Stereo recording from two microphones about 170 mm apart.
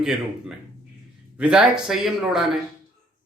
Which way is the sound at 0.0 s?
5° right (ahead or behind).